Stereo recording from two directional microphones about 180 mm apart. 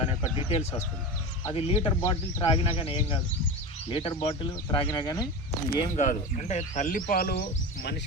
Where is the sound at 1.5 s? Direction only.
30° left (ahead or behind).